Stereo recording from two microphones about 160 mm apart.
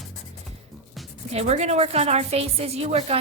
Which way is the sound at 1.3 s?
45° right (ahead or behind).